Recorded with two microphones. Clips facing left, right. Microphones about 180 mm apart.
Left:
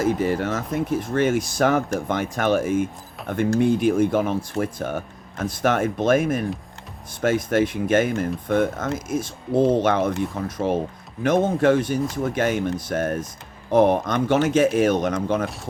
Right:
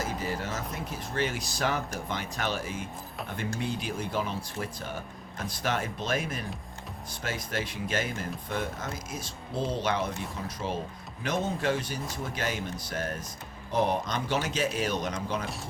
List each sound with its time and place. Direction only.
0.2 s speech: 60° left (ahead or behind)